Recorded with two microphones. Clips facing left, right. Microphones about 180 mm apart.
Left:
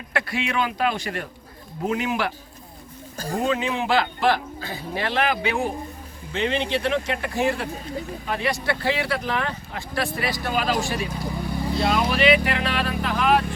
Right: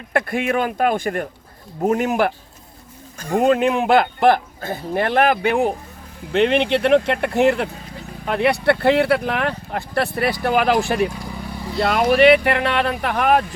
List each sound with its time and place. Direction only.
0.1 s speech: 50° right (ahead or behind)
3.3 s speech: 55° right (ahead or behind)